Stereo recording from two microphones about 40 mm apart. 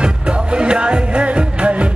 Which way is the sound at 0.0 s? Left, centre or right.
Right.